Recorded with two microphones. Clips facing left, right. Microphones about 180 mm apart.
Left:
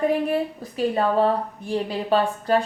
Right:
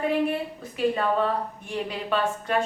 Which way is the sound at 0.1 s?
40° left (ahead or behind).